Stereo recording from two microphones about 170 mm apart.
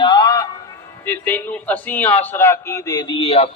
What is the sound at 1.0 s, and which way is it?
A man's voice, 10° left (ahead or behind).